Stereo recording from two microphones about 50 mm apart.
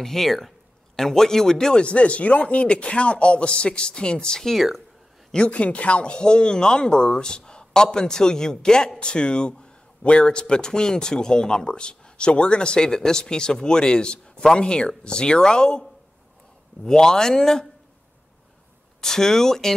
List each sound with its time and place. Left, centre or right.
0.0 s speech: centre
1.9 s a man's voice: left
4.4 s speech: centre
5.3 s speech: left
16.8 s speech: centre
18.9 s speech: centre